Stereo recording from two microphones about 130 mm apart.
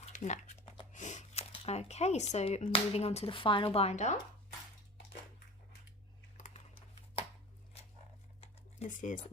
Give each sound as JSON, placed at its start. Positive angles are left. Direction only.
{"t": 0.0, "sound": "a sound", "side_deg": 70}
{"t": 2.6, "sound": "speech", "side_deg": 45}
{"t": 6.3, "sound": "typing", "side_deg": 75}
{"t": 8.9, "sound": "speech", "side_deg": 75}